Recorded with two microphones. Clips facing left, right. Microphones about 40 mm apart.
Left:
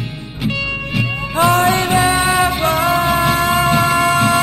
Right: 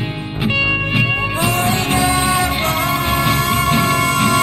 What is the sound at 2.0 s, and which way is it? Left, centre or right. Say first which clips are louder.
Music: left 2 dB; left.